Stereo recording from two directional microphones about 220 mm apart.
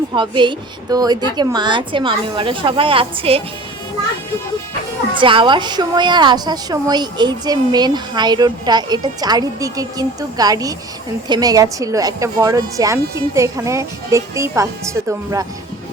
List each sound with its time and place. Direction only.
0.1 s a woman's voice: 20° right (ahead or behind)
5.2 s a woman's voice: 20° right (ahead or behind)